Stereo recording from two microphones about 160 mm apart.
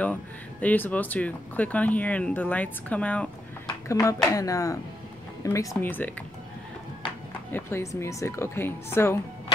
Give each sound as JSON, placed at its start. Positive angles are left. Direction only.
{"t": 0.0, "sound": "speech", "side_deg": 10}
{"t": 3.6, "sound": "speech", "side_deg": 20}
{"t": 7.5, "sound": "speech", "side_deg": 15}